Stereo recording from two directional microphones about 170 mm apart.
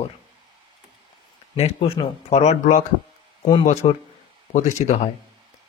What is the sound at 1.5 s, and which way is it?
Speech, 35° left (ahead or behind).